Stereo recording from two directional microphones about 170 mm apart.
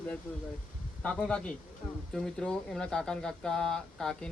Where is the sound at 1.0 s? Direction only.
5° left (ahead or behind).